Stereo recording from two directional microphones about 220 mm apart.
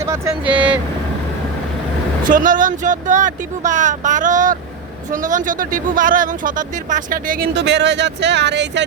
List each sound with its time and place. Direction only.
0.0 s speech: 15° right (ahead or behind)
2.2 s speech: 40° right (ahead or behind)